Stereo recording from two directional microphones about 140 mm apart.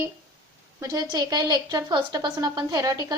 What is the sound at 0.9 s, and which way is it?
A woman's voice, 30° right (ahead or behind).